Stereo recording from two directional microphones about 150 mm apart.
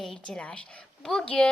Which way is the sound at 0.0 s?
5° left (ahead or behind).